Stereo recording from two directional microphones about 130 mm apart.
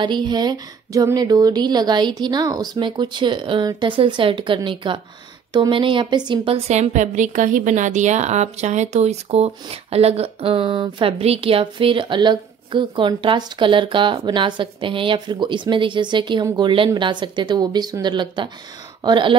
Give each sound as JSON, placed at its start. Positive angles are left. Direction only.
{"t": 0.0, "sound": "a woman's voice", "side_deg": -35}
{"t": 6.7, "sound": "a woman's voice", "side_deg": -60}